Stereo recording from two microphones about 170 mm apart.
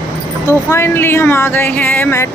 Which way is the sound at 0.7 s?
15° left (ahead or behind).